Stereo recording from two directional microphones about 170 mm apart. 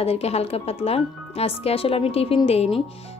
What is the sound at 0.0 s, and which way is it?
A woman's voice, 35° left (ahead or behind).